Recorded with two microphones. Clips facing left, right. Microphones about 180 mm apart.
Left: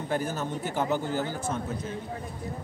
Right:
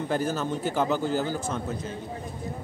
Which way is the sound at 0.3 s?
90° right.